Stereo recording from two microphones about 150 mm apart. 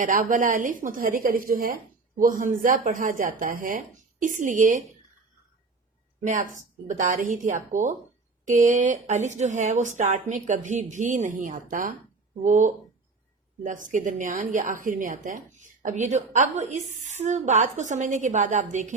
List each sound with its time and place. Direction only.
0.0 s a woman's voice: 60° right (ahead or behind)
6.2 s a woman's voice: 60° right (ahead or behind)